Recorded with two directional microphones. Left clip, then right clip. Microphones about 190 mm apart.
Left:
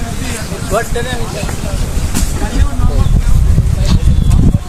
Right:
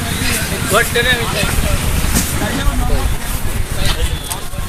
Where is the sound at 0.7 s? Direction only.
35° left (ahead or behind).